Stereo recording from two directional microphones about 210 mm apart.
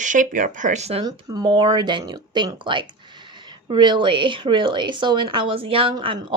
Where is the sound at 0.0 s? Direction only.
40° right (ahead or behind).